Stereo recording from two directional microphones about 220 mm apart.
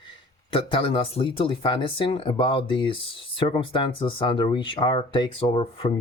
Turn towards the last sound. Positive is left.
turn(degrees=25)  # may be behind; listen again after turning